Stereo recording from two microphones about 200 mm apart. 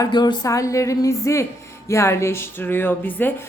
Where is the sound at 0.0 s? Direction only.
20° left (ahead or behind).